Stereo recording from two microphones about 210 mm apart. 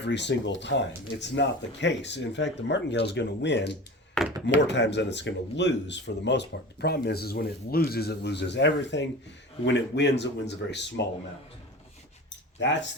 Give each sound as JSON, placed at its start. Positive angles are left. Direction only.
{"t": 0.0, "sound": "speech", "side_deg": 55}
{"t": 4.2, "sound": "a sound", "side_deg": 5}
{"t": 4.6, "sound": "speech", "side_deg": 55}